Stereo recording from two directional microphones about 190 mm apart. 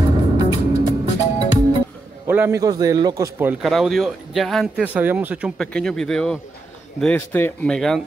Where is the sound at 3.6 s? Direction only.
Centre (ahead or behind).